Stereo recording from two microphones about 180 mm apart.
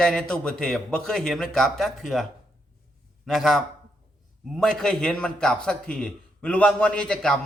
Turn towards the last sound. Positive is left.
turn(degrees=5)  # may be behind; listen again after turning